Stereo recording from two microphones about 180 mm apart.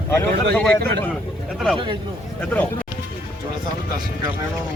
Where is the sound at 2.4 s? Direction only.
10° left (ahead or behind).